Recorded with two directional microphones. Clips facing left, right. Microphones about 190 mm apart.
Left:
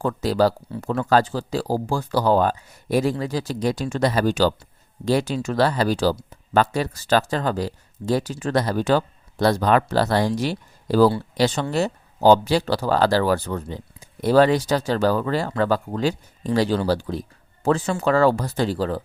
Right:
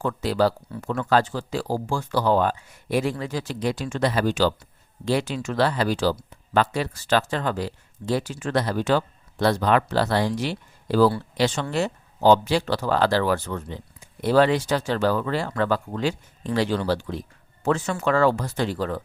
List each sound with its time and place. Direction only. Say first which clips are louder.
0.0 s speech: left 2 dB; 40° left (ahead or behind)